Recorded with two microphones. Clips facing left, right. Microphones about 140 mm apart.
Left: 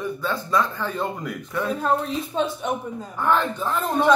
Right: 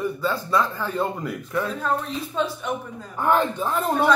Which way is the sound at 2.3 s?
25° left (ahead or behind).